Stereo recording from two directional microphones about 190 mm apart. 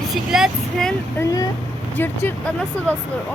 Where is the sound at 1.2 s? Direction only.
15° left (ahead or behind).